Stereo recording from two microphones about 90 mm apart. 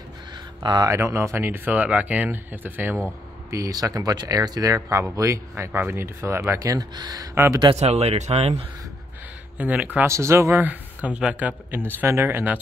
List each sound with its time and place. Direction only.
0.6 s speech: 55° right (ahead or behind)
0.8 s speech: 35° right (ahead or behind)
3.4 s speech: 40° right (ahead or behind)
5.7 s speech: 25° right (ahead or behind); by 7.2 s 45° right (ahead or behind)
7.6 s speech: 90° right
9.6 s speech: 15° right (ahead or behind)
10.0 s speech: 30° right (ahead or behind)
10.6 s speech: 20° right (ahead or behind)